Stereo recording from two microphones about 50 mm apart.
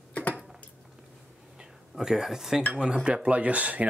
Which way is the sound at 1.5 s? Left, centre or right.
Centre.